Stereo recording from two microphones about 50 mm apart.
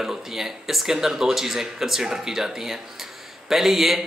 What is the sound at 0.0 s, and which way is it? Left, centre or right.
A man's voice, centre.